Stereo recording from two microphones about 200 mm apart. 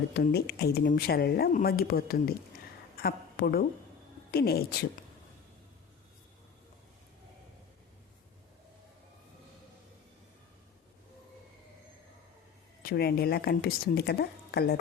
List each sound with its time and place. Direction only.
0.1 s a woman's voice: 55° left (ahead or behind)
12.8 s speech: 50° left (ahead or behind)